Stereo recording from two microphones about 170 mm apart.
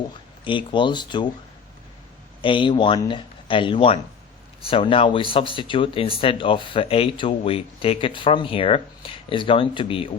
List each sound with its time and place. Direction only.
0.4 s speech: 30° left (ahead or behind)
2.4 s speech: 30° left (ahead or behind)